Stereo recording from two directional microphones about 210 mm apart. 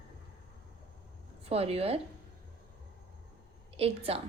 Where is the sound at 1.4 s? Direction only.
30° right (ahead or behind).